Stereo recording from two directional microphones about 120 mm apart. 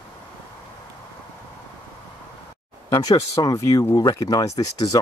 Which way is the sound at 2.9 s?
30° left (ahead or behind).